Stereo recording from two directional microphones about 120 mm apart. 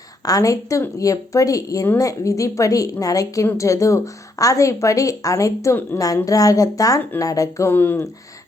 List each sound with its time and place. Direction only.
0.3 s a woman's voice: 30° left (ahead or behind)